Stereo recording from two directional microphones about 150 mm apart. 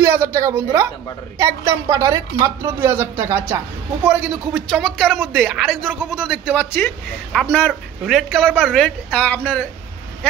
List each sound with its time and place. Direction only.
0.0 s a woman's voice: 20° right (ahead or behind)
4.6 s a woman's voice: 5° left (ahead or behind)
6.5 s speech: 10° left (ahead or behind)